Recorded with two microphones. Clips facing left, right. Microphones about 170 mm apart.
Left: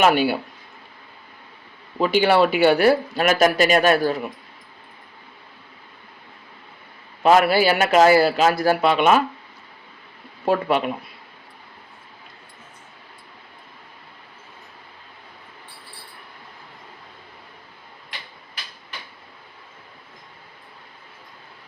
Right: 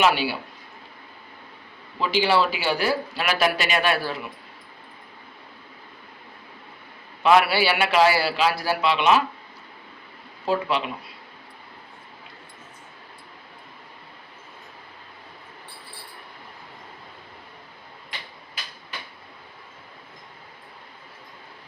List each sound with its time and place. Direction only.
0.0 s speech: 50° left (ahead or behind)
2.0 s speech: 50° left (ahead or behind)
7.2 s speech: 45° left (ahead or behind)
10.4 s speech: 55° left (ahead or behind)